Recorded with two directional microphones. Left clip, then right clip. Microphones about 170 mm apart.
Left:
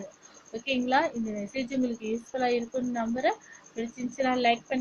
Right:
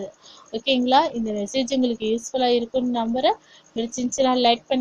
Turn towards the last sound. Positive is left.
turn(degrees=-45)  # may be behind; listen again after turning